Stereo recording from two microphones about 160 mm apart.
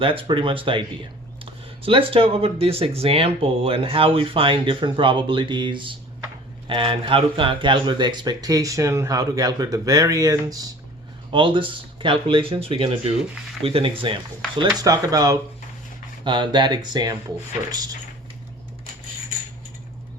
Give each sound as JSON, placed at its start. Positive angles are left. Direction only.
{"t": 0.0, "sound": "speech", "side_deg": -35}
{"t": 13.3, "sound": "speech", "side_deg": 0}
{"t": 13.7, "sound": "speech", "side_deg": -35}
{"t": 14.8, "sound": "speech", "side_deg": -20}